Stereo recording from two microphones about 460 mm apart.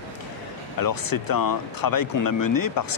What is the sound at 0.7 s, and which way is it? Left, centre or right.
Speech, left.